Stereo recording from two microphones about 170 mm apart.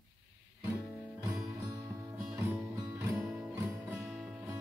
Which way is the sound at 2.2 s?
5° right (ahead or behind).